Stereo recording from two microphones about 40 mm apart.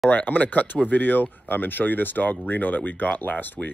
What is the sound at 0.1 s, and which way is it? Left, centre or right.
Speech, left.